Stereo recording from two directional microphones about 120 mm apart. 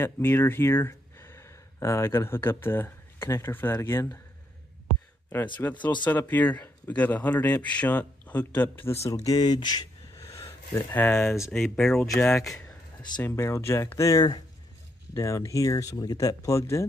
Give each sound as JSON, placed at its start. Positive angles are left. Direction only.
{"t": 0.0, "sound": "speech", "side_deg": 20}
{"t": 5.3, "sound": "speech", "side_deg": 15}
{"t": 9.0, "sound": "speech", "side_deg": 30}
{"t": 11.5, "sound": "speech", "side_deg": 5}
{"t": 13.2, "sound": "speech", "side_deg": 20}